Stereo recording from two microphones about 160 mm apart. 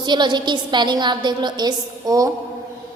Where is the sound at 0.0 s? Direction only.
30° right (ahead or behind).